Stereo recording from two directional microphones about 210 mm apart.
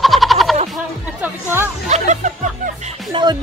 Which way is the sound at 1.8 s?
35° right (ahead or behind).